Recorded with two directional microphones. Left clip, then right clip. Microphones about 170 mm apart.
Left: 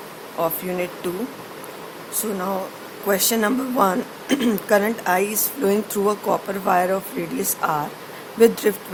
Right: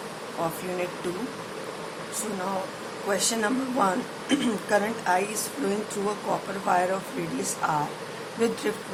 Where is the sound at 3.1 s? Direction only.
65° left (ahead or behind).